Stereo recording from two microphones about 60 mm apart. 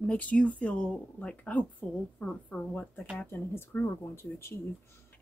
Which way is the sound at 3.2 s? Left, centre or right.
Left.